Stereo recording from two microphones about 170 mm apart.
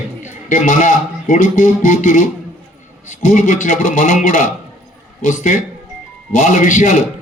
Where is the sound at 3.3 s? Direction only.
50° left (ahead or behind).